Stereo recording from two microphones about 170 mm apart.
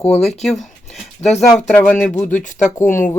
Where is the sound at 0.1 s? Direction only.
40° left (ahead or behind).